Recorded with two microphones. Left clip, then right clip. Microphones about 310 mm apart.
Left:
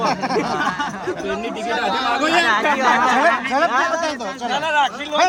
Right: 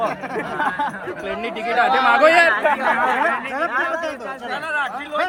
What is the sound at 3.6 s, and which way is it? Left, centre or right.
Speech, left.